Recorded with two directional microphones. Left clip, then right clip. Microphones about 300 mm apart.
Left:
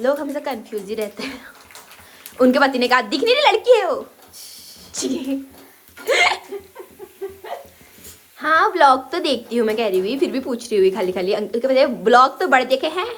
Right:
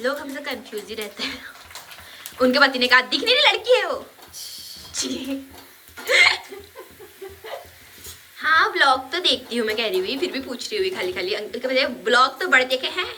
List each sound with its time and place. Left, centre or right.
0.0 s a woman's voice: centre
6.1 s hiccup: centre
8.4 s a woman's voice: centre